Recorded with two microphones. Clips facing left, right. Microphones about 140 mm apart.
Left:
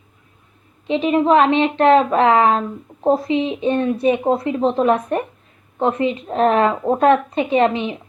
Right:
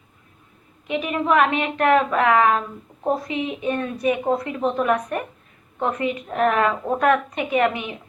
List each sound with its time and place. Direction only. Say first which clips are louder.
0.9 s a woman's voice: left 6 dB; 25° left (ahead or behind)